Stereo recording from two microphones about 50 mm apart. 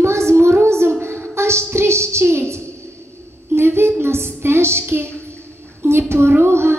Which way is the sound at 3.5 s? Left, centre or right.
Right.